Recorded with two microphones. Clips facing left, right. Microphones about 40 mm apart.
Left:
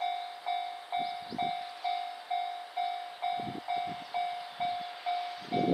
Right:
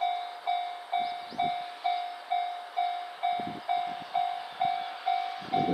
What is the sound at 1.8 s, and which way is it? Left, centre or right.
Train, right.